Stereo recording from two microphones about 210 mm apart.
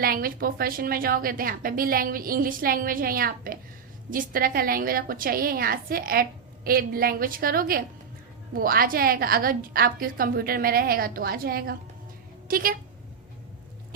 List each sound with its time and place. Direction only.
0.0 s a woman's voice: 45° right (ahead or behind)